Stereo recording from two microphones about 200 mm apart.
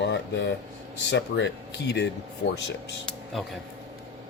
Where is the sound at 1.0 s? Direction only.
60° left (ahead or behind).